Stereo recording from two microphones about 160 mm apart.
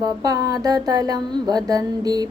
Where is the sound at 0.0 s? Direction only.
25° right (ahead or behind).